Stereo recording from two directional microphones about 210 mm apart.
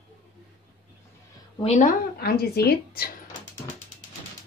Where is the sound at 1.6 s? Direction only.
35° left (ahead or behind).